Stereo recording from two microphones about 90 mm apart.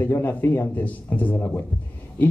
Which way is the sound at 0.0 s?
20° left (ahead or behind).